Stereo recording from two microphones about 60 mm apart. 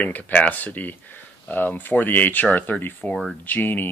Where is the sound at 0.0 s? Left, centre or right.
Left.